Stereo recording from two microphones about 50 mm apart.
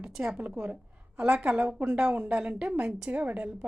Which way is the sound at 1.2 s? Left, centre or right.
Right.